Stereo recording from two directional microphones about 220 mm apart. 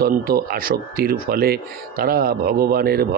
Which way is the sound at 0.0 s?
40° right (ahead or behind).